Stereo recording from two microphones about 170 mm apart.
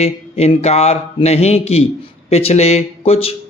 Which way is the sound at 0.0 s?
35° left (ahead or behind).